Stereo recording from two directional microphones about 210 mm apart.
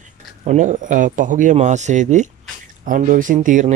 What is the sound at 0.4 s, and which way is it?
Speech, 35° right (ahead or behind).